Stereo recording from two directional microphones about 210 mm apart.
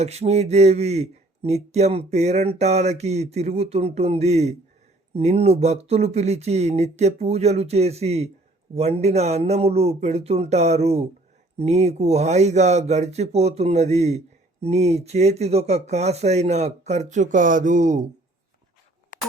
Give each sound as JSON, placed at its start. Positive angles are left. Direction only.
{"t": 0.0, "sound": "speech", "side_deg": -30}